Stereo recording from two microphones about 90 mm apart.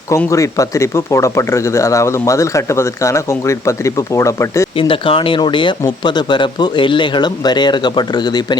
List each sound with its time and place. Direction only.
0.3 s speech: 35° left (ahead or behind)
4.8 s speech: 80° left; by 8.5 s 50° left (ahead or behind)